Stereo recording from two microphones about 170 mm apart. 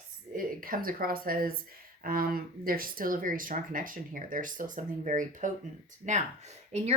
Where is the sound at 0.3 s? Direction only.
55° right (ahead or behind).